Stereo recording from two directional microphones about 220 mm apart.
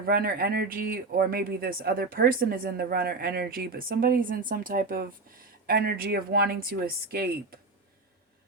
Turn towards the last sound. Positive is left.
turn(degrees=-45)  # may be behind; listen again after turning